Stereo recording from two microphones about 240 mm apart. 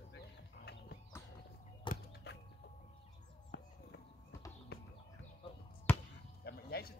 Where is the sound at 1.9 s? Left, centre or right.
Centre.